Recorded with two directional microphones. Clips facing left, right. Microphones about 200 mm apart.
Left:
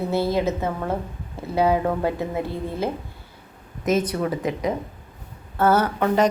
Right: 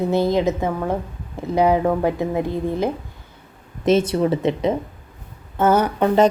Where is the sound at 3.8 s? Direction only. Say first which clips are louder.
Right 5 dB; 30° right (ahead or behind).